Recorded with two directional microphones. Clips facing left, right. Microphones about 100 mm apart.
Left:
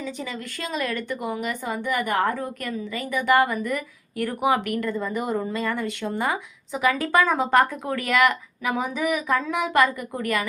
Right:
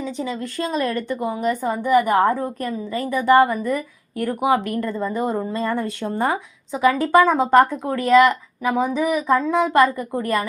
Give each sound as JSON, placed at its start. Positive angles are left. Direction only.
{"t": 0.0, "sound": "a woman's voice", "side_deg": -30}